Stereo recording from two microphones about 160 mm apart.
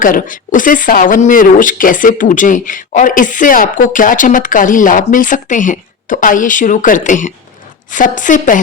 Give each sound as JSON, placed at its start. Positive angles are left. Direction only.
{"t": 0.0, "sound": "a woman's voice", "side_deg": 60}